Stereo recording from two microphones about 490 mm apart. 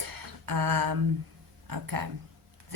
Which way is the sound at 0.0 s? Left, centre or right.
Right.